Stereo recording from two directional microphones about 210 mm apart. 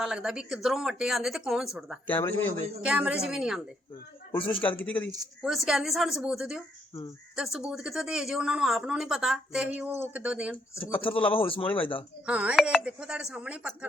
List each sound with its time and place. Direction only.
0.0 s speech: centre (ahead or behind)
2.0 s speech: 10° left (ahead or behind)
2.8 s speech: 5° right (ahead or behind)
4.7 s speech: 5° left (ahead or behind)
11.0 s speech: 25° left (ahead or behind)
11.6 s speech: 5° left (ahead or behind)
12.2 s speech: 5° right (ahead or behind)